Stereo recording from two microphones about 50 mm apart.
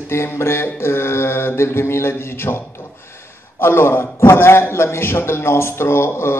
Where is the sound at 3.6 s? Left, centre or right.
Left.